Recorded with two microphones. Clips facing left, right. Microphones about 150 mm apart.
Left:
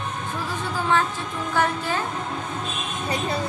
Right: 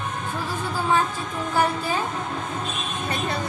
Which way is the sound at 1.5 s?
10° right (ahead or behind).